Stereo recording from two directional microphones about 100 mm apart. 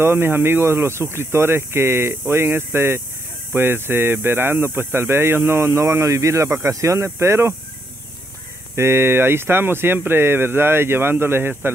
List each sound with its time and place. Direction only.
0.0 s speech: 25° right (ahead or behind)
8.7 s speech: 25° right (ahead or behind)